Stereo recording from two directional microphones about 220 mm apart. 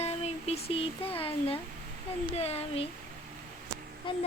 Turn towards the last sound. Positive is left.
turn(degrees=25)  # may be behind; listen again after turning